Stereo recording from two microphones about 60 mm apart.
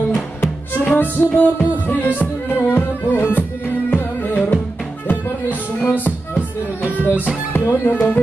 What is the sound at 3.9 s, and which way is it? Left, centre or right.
Music, left.